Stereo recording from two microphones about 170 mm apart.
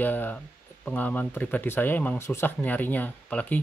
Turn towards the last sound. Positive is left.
turn(degrees=10)  # may be behind; listen again after turning